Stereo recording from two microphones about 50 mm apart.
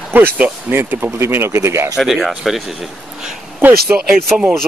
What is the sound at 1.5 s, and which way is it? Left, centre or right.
Speech, right.